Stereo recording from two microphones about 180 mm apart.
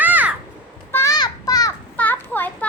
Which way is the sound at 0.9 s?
15° left (ahead or behind).